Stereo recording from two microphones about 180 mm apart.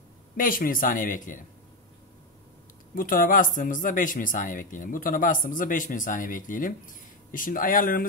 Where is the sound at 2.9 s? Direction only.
50° left (ahead or behind).